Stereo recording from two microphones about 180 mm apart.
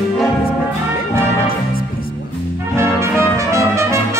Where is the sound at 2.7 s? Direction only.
15° right (ahead or behind).